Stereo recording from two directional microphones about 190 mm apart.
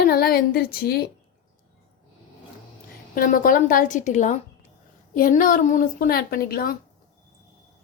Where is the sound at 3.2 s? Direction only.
45° left (ahead or behind).